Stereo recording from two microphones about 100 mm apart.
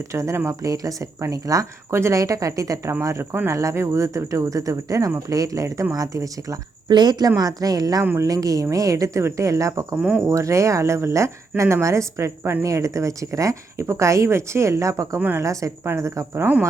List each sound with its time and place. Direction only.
0.1 s speech: 30° right (ahead or behind)
15.2 s speech: 20° right (ahead or behind)
15.4 s speech: 35° right (ahead or behind)